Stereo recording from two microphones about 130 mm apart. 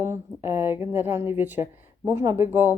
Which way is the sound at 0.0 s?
20° right (ahead or behind).